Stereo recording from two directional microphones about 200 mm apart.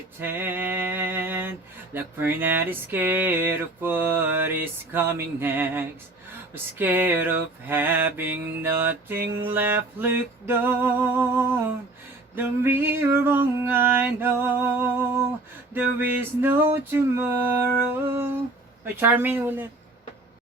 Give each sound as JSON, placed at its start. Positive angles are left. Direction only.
{"t": 0.2, "sound": "speech", "side_deg": -10}
{"t": 18.9, "sound": "speech", "side_deg": -10}